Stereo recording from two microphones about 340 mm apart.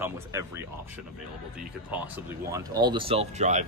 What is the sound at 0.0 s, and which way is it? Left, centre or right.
Speech, centre.